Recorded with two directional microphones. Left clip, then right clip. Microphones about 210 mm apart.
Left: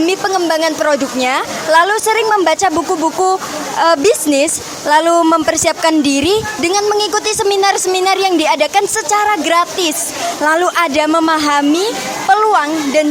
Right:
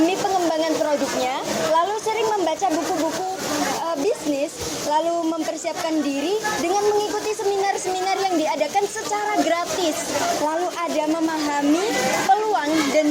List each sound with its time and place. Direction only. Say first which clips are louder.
0.0 s a woman's voice: left 6 dB; 40° left (ahead or behind)
3.8 s a woman's voice: left 12 dB; 40° left (ahead or behind)